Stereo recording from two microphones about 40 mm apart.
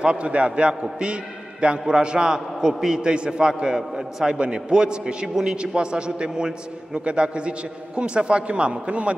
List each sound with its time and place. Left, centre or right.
0.0 s a man's voice: right